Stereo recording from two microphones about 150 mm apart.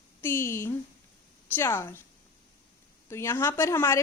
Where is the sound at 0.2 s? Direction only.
15° left (ahead or behind).